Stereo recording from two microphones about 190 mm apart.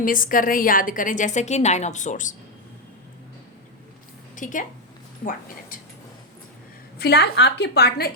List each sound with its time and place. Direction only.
0.0 s a woman's voice: 45° left (ahead or behind)
4.4 s a woman's voice: 45° left (ahead or behind)
7.0 s a woman's voice: 60° left (ahead or behind)